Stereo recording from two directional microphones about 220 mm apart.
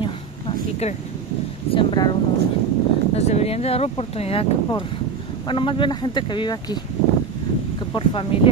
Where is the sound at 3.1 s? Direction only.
30° left (ahead or behind).